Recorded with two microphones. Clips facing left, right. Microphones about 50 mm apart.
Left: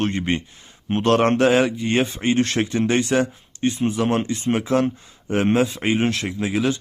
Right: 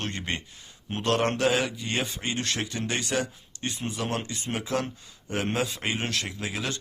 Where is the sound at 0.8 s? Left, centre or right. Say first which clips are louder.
Left 8 dB; left.